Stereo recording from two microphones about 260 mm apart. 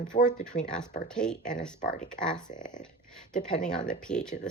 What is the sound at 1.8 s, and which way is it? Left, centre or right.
Speech, left.